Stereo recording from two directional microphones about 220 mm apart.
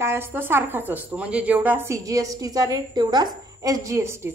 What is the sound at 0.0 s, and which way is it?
A woman's voice, 10° right (ahead or behind).